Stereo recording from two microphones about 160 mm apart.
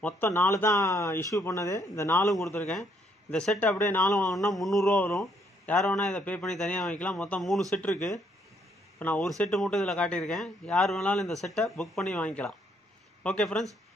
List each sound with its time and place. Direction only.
0.0 s speech: 10° left (ahead or behind)
2.5 s speech: 5° left (ahead or behind)
4.2 s speech: centre (ahead or behind)
9.0 s speech: 10° left (ahead or behind)